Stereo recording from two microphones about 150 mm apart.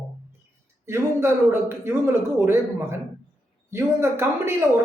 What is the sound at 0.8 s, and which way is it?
Speech, 15° right (ahead or behind).